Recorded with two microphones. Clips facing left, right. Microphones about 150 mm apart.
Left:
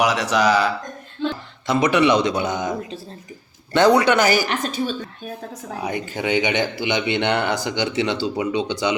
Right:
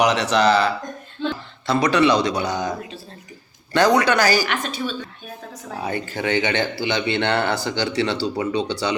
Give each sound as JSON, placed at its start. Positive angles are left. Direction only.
{"t": 0.0, "sound": "speech", "side_deg": 10}
{"t": 4.4, "sound": "a woman's voice", "side_deg": 40}
{"t": 5.8, "sound": "speech", "side_deg": 15}